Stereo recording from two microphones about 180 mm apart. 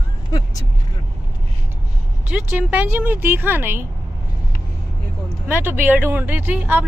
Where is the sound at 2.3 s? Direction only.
10° right (ahead or behind).